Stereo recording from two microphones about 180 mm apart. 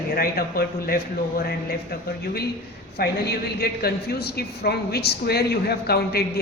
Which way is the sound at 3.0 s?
60° left (ahead or behind).